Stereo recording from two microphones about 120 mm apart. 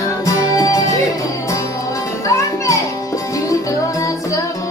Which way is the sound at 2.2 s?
25° left (ahead or behind).